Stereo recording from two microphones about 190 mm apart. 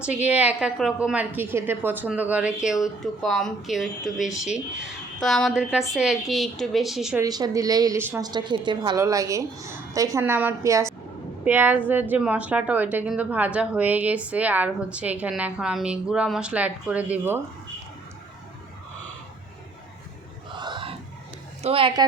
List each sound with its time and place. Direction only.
0.0 s a woman's voice: 5° right (ahead or behind)
7.2 s a woman's voice: 20° right (ahead or behind)
20.5 s a sound: 25° right (ahead or behind)
21.6 s a woman's voice: 30° right (ahead or behind)